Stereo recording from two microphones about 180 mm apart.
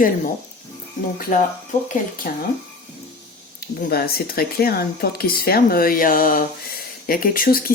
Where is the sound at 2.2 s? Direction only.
50° left (ahead or behind).